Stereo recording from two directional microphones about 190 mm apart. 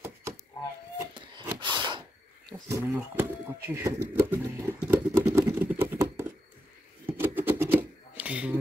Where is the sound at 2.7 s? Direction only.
10° right (ahead or behind).